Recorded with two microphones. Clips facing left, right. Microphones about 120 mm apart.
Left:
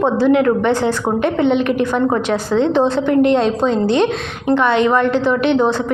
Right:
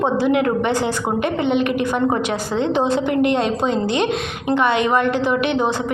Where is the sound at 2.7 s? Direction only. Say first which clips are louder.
Left 2 dB; 10° right (ahead or behind).